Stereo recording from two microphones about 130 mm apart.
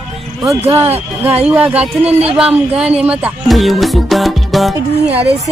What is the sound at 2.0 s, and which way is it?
Speech, 50° right (ahead or behind).